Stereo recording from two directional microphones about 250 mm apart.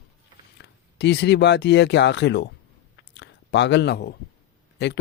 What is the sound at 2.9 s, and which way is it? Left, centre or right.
Chewing, left.